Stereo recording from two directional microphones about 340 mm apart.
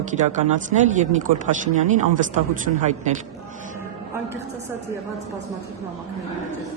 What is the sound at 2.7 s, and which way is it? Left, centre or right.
Speech, right.